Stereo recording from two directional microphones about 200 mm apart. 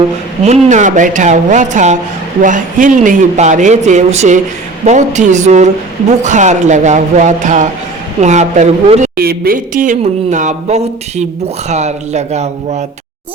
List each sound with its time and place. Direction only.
0.4 s speech: 35° right (ahead or behind)
9.1 s speech: 50° right (ahead or behind); by 12.8 s 35° right (ahead or behind)